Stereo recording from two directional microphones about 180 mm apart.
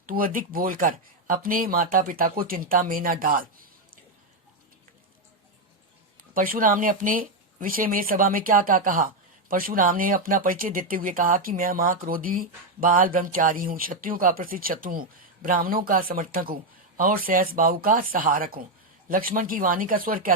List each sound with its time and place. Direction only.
0.0 s speech: 50° right (ahead or behind)
6.1 s speech: 50° right (ahead or behind)